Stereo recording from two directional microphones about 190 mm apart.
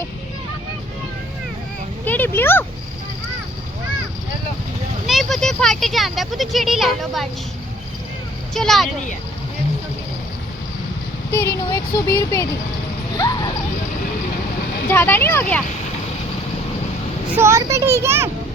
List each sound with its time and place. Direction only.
2.0 s speech: 10° left (ahead or behind)
5.0 s speech: centre (ahead or behind)
8.5 s speech: centre (ahead or behind)
11.3 s speech: 15° left (ahead or behind)
13.1 s dog: 20° left (ahead or behind)
14.8 s speech: 10° left (ahead or behind)
17.3 s a child's voice: 15° right (ahead or behind)